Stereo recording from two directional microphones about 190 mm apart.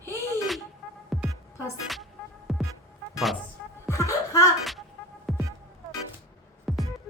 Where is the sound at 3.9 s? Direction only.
15° left (ahead or behind).